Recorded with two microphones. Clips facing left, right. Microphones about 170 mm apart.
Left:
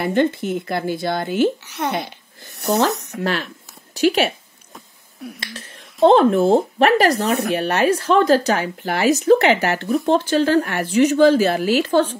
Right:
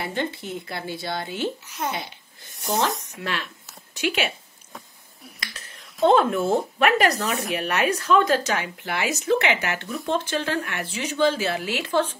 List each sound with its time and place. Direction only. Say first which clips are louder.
0.0 s speech: left 10 dB; 55° left (ahead or behind)
1.6 s speech: left 6 dB; 70° left (ahead or behind)
3.2 s a woman's voice: left 8 dB; 45° left (ahead or behind)
5.9 s speech: left 6 dB; 30° left (ahead or behind)
7.2 s speech: left 7 dB; 60° left (ahead or behind)
7.5 s speech: left 4 dB; 30° left (ahead or behind)
9.8 s speech: left 10 dB; 55° left (ahead or behind)
10.1 s speech: left 8 dB; 35° left (ahead or behind)